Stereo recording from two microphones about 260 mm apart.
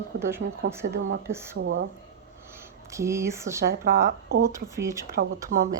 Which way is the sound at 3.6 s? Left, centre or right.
Right.